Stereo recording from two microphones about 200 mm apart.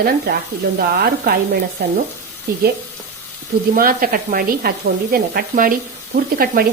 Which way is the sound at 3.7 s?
45° right (ahead or behind).